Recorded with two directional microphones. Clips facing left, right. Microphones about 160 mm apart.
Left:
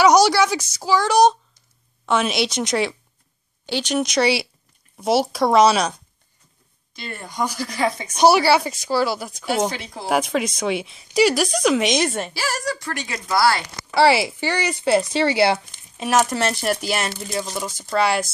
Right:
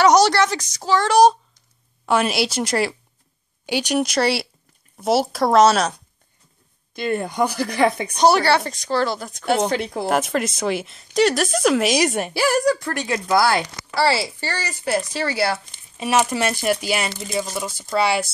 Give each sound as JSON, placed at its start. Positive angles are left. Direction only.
{"t": 0.0, "sound": "speech", "side_deg": 5}
{"t": 7.0, "sound": "speech", "side_deg": -55}
{"t": 8.2, "sound": "speech", "side_deg": 5}
{"t": 9.7, "sound": "speech", "side_deg": -60}
{"t": 10.0, "sound": "speech", "side_deg": 0}
{"t": 12.4, "sound": "speech", "side_deg": -55}
{"t": 13.9, "sound": "speech", "side_deg": 15}
{"t": 16.0, "sound": "speech", "side_deg": -5}